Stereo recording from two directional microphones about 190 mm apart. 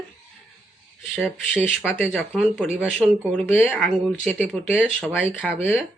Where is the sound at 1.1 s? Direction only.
5° right (ahead or behind).